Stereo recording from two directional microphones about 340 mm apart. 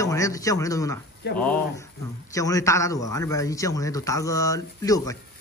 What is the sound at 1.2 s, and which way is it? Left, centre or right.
Speech, left.